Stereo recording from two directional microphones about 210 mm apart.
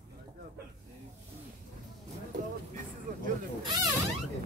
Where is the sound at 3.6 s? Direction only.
20° right (ahead or behind).